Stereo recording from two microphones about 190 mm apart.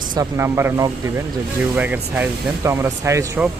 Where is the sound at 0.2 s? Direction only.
15° right (ahead or behind).